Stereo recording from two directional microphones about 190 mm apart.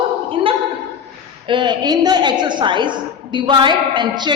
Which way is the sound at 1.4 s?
25° right (ahead or behind).